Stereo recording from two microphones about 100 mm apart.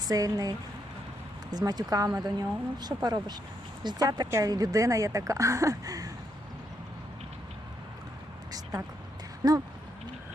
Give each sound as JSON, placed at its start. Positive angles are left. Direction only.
{"t": 0.1, "sound": "speech", "side_deg": -35}